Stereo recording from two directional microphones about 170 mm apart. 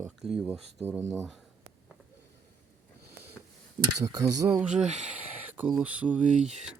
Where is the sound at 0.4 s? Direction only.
10° left (ahead or behind).